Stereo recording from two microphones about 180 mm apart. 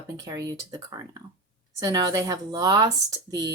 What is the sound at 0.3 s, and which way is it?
Speech, 20° right (ahead or behind).